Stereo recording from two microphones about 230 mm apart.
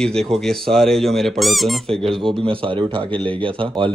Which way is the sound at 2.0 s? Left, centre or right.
Right.